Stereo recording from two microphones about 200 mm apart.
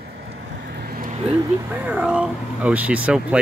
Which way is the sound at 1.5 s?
10° right (ahead or behind).